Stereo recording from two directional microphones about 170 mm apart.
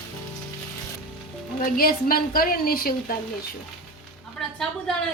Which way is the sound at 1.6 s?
60° left (ahead or behind).